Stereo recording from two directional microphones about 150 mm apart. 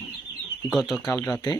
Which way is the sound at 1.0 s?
20° left (ahead or behind).